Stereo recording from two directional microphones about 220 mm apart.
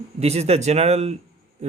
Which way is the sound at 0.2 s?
30° right (ahead or behind).